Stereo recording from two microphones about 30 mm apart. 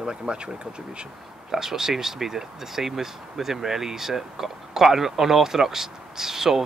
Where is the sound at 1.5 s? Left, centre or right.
Centre.